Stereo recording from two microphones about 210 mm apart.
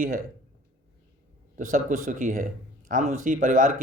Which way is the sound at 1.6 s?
40° right (ahead or behind).